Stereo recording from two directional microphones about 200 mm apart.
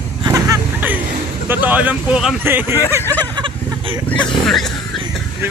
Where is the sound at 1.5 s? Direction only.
10° right (ahead or behind).